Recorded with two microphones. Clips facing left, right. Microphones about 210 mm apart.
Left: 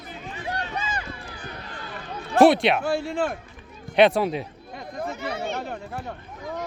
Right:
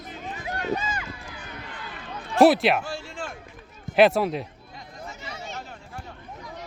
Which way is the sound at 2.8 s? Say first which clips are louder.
Left 10 dB; 60° left (ahead or behind).